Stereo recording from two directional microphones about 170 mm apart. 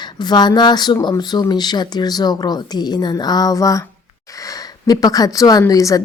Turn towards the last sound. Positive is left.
turn(degrees=20)  # may be behind; listen again after turning